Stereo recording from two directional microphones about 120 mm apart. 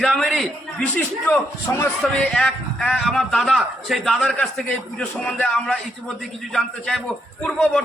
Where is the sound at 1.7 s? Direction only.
25° left (ahead or behind).